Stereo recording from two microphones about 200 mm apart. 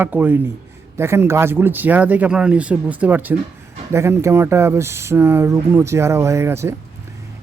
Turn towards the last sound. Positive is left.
turn(degrees=-15)  # may be behind; listen again after turning